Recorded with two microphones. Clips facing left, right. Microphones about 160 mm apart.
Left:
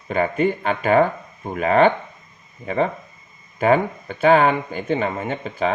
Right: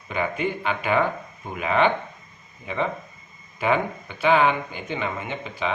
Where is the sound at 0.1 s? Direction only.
40° left (ahead or behind).